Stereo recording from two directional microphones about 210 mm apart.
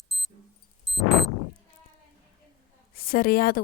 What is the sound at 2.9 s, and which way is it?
Speech, 45° left (ahead or behind).